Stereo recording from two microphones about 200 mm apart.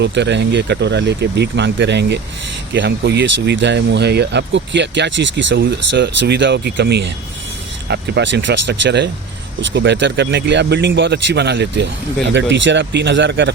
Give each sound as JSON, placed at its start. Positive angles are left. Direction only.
{"t": 0.0, "sound": "speech", "side_deg": -60}